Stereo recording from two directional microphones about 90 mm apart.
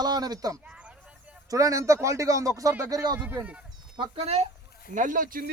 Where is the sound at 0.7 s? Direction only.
15° right (ahead or behind).